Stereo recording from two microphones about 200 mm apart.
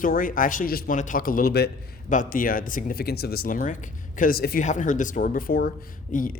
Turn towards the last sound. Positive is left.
turn(degrees=45)  # may be behind; listen again after turning